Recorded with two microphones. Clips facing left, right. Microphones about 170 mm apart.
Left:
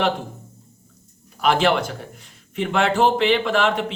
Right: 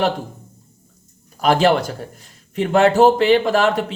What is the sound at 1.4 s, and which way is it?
A man's voice, 40° right (ahead or behind).